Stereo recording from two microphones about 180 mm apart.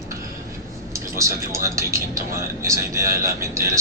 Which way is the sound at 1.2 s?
15° right (ahead or behind).